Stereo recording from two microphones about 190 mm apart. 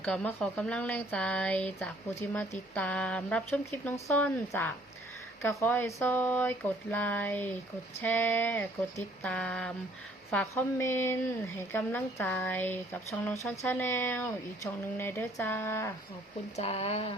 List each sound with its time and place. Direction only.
0.0 s speech: 5° left (ahead or behind)
16.6 s speech: 35° left (ahead or behind)